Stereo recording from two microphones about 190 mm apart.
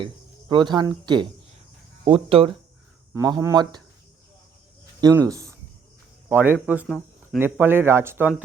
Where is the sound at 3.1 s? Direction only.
20° right (ahead or behind).